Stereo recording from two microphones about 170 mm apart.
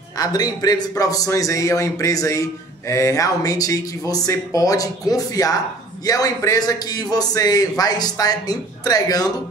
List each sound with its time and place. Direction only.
0.2 s a man's voice: 20° left (ahead or behind)